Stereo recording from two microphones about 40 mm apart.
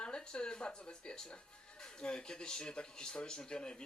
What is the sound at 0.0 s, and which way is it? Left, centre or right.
Speech, left.